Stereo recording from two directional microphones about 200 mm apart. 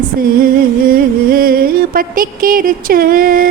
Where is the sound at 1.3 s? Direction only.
45° right (ahead or behind).